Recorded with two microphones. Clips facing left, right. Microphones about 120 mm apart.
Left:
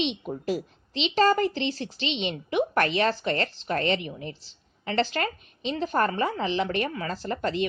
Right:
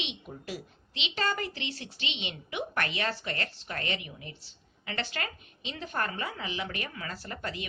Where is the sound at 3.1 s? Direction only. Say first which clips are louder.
Left 9 dB; 25° left (ahead or behind).